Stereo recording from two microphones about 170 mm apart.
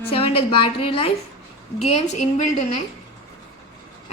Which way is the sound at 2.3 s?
45° left (ahead or behind).